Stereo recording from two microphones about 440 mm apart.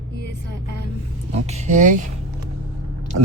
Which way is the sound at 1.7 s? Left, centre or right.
Centre.